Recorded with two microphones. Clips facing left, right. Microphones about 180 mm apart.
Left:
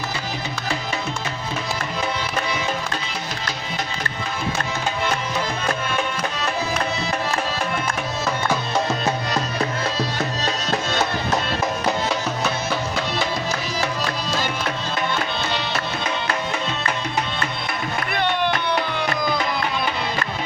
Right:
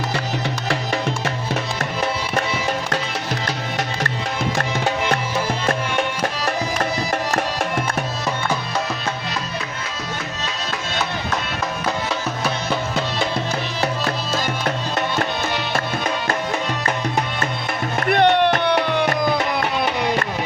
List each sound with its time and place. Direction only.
10.4 s music: 40° left (ahead or behind)
18.0 s music: 50° right (ahead or behind)
19.0 s music: 55° right (ahead or behind)